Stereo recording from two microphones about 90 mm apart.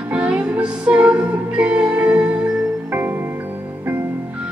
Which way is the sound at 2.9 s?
25° right (ahead or behind).